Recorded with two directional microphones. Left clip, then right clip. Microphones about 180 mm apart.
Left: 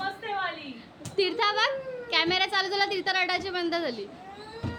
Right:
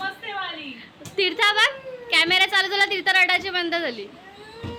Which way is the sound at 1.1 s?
Centre (ahead or behind).